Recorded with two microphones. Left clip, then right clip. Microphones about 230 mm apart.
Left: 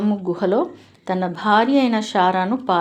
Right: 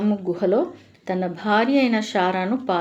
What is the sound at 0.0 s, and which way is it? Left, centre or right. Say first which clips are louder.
Speech: left 1 dB; centre.